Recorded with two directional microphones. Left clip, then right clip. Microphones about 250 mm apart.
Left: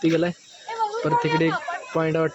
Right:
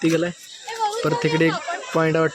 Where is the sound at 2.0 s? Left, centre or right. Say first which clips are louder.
Right 3 dB; centre.